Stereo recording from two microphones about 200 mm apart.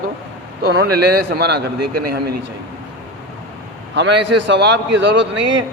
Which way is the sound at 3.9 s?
60° right (ahead or behind).